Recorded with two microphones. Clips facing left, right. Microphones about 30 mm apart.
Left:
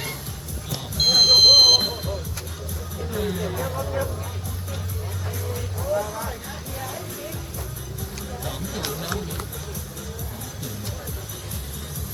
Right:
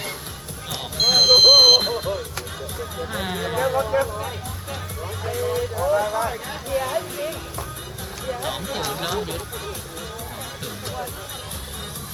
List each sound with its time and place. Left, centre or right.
0.7 s vehicle: centre
3.1 s speech: right
5.3 s music: right